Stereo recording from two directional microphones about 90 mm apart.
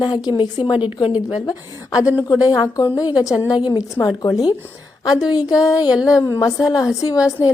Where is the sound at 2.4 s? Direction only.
45° left (ahead or behind).